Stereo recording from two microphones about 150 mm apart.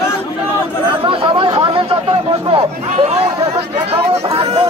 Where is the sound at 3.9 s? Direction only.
40° right (ahead or behind).